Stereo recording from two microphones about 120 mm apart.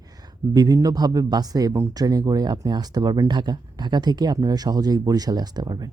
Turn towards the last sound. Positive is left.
turn(degrees=-35)  # may be behind; listen again after turning